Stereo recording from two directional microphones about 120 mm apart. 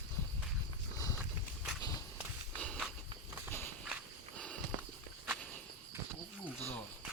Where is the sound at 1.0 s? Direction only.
30° left (ahead or behind).